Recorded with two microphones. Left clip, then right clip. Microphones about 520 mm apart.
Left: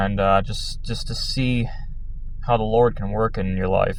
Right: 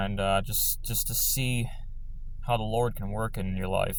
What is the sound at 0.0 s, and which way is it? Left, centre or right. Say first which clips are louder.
Speech: left 9 dB; right.